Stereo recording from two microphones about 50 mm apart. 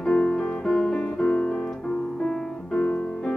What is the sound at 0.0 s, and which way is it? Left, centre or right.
Music, centre.